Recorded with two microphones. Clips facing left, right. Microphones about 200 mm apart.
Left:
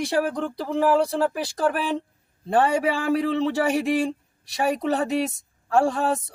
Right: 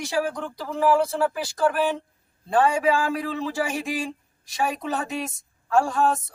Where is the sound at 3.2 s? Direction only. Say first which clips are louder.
Left 6 dB; 65° left (ahead or behind).